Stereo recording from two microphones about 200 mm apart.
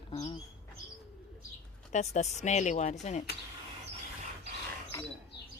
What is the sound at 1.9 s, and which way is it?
Speech, 35° left (ahead or behind).